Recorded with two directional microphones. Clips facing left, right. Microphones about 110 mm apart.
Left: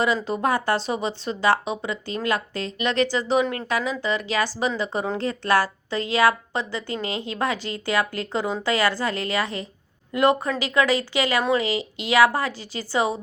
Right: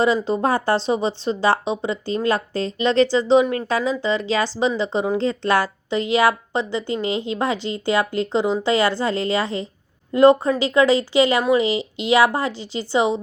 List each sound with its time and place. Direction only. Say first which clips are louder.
0.3 s speech: right 3 dB; 30° right (ahead or behind)